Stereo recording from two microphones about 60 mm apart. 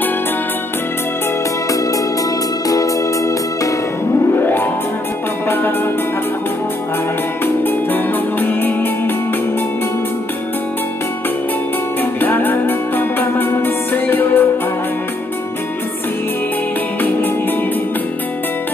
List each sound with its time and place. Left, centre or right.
2.7 s music: left
4.4 s music: left
7.4 s music: left
12.0 s music: left